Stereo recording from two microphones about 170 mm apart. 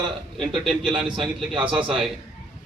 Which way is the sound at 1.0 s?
30° right (ahead or behind).